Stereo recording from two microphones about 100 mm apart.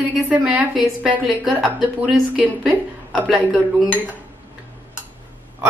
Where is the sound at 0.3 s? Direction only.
15° right (ahead or behind).